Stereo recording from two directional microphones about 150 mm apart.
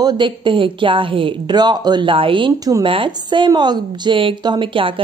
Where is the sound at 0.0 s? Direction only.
30° right (ahead or behind).